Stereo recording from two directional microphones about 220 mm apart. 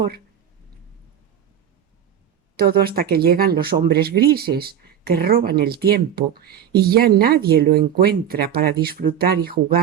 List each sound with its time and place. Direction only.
2.6 s speech: 45° right (ahead or behind)